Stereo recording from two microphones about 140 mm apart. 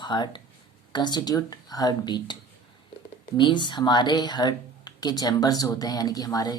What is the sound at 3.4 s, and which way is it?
Speech, 35° left (ahead or behind).